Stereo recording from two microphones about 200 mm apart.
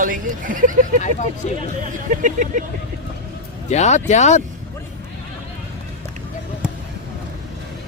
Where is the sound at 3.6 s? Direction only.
35° left (ahead or behind).